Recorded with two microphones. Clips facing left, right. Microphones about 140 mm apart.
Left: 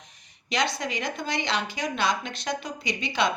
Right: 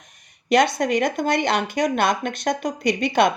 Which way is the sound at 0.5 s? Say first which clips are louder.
Right 10 dB; 55° right (ahead or behind).